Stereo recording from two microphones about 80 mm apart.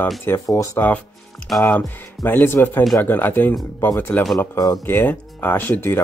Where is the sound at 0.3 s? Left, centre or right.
Left.